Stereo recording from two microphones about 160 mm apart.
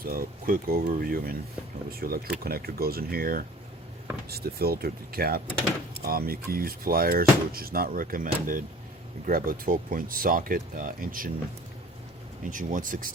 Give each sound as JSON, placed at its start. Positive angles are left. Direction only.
{"t": 0.0, "sound": "speech", "side_deg": -65}
{"t": 12.5, "sound": "speech", "side_deg": -55}